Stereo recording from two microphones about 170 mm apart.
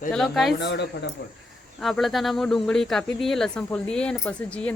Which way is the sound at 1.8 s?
Centre (ahead or behind).